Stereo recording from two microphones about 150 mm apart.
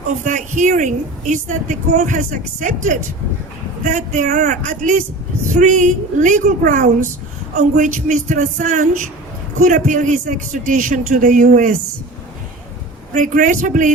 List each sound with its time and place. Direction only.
0.3 s a woman's voice: 55° right (ahead or behind)
13.1 s a woman's voice: 60° right (ahead or behind)